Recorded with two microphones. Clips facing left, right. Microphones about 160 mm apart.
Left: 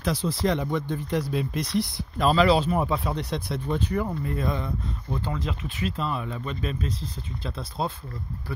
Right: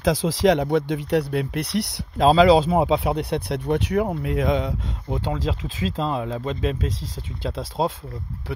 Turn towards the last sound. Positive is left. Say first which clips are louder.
# right 6 dB
turn(degrees=-90)